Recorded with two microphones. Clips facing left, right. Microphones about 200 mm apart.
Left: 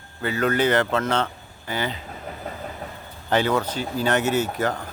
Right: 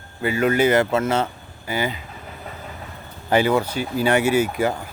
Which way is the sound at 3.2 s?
10° right (ahead or behind).